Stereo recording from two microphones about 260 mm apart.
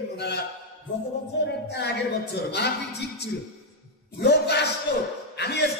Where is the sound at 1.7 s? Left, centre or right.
Left.